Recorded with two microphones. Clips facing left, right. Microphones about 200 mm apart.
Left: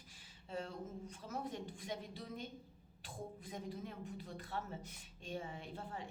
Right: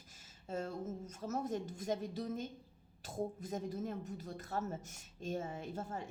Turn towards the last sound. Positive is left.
turn(degrees=-45)  # may be behind; listen again after turning